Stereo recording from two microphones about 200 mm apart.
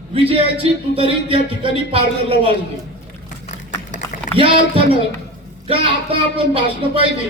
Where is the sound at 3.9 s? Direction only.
40° left (ahead or behind).